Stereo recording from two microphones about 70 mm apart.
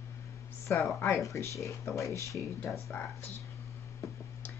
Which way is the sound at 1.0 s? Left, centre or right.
Left.